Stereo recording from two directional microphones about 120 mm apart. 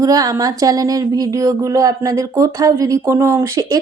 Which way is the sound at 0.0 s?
30° right (ahead or behind).